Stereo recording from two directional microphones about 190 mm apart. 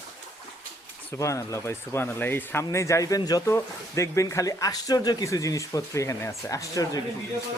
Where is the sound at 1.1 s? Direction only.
15° left (ahead or behind).